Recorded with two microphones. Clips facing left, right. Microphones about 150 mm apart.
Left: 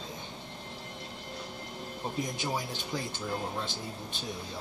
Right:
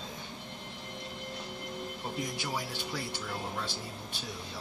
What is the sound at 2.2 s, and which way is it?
Speech, 20° left (ahead or behind).